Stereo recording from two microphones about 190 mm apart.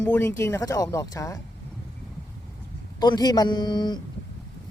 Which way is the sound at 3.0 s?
20° left (ahead or behind).